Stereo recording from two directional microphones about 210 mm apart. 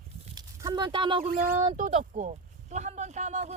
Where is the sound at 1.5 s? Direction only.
20° right (ahead or behind).